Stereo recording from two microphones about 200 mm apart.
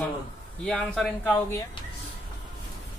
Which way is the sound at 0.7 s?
5° left (ahead or behind).